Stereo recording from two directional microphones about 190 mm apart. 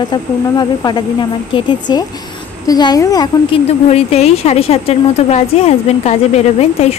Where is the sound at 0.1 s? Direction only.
20° left (ahead or behind).